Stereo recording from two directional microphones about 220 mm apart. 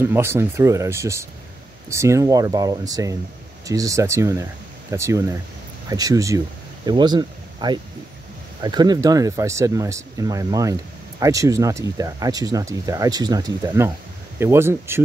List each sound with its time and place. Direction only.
0.0 s speech: 10° right (ahead or behind)